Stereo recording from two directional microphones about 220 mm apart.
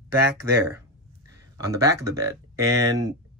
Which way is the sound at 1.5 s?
15° right (ahead or behind).